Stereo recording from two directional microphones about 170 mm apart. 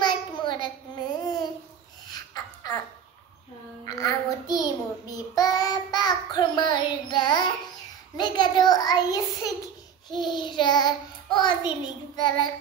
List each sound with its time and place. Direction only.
0.0 s a sound: 25° left (ahead or behind)
2.0 s dog: 20° left (ahead or behind)
3.8 s child singing: 20° left (ahead or behind)
8.2 s a child's voice: 25° left (ahead or behind)
10.1 s child singing: 25° left (ahead or behind)